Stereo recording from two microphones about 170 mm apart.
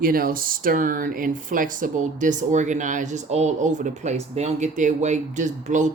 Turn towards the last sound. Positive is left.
turn(degrees=-45)  # may be behind; listen again after turning